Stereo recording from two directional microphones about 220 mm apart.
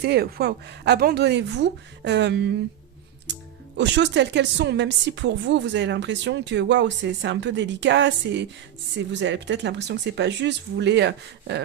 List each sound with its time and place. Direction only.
0.0 s a woman's voice: 50° right (ahead or behind)
3.8 s a woman's voice: 55° right (ahead or behind)